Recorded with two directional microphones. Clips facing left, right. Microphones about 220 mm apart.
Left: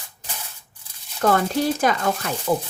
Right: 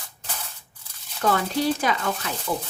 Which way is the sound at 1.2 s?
45° left (ahead or behind).